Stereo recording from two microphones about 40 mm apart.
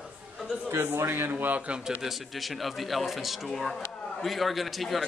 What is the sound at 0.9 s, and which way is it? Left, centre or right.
Speech, right.